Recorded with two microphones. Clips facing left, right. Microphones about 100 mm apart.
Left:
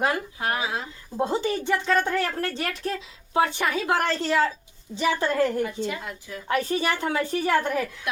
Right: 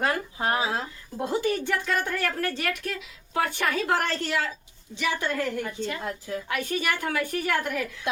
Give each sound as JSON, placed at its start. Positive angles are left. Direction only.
{"t": 0.3, "sound": "speech", "side_deg": -30}
{"t": 1.1, "sound": "a woman's voice", "side_deg": 25}
{"t": 5.6, "sound": "a woman's voice", "side_deg": 5}
{"t": 6.5, "sound": "a woman's voice", "side_deg": 30}
{"t": 8.1, "sound": "speech", "side_deg": -25}